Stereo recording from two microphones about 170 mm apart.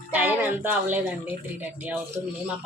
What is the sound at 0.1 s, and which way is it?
Music, 10° right (ahead or behind).